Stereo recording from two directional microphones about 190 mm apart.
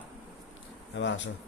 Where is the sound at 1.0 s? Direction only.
75° left (ahead or behind).